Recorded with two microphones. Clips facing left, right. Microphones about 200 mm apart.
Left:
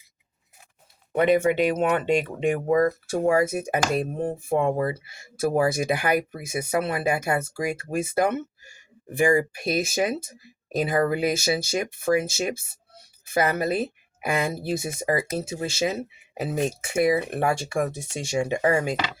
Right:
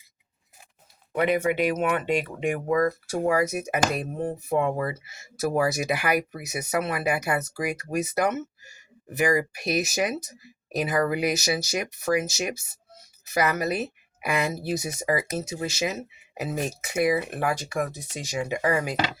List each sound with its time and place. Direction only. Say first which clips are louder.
1.1 s speech: left 3 dB; 30° left (ahead or behind)
13.2 s speech: left 2 dB; 30° left (ahead or behind)